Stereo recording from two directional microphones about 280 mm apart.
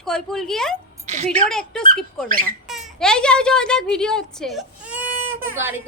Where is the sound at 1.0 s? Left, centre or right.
Right.